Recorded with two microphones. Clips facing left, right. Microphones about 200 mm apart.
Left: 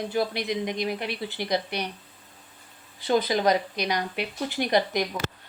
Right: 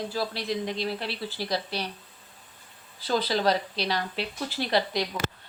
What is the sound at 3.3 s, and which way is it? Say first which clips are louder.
A woman's voice: left 2 dB; 15° left (ahead or behind).